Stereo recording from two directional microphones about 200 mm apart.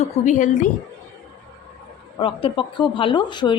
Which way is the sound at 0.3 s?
40° left (ahead or behind).